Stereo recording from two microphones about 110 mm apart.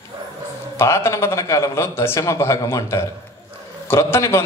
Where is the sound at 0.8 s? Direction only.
25° left (ahead or behind).